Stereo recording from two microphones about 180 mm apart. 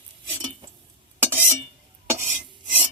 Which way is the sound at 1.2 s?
10° right (ahead or behind).